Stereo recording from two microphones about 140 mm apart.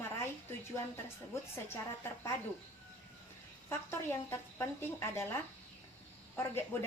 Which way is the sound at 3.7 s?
15° left (ahead or behind).